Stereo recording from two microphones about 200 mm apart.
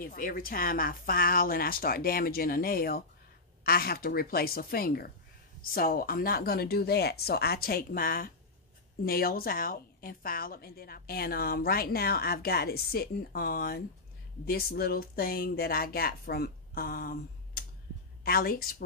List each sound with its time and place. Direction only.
0.0 s a woman's voice: 45° left (ahead or behind)